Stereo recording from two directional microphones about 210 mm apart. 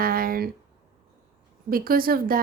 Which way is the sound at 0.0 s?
45° right (ahead or behind).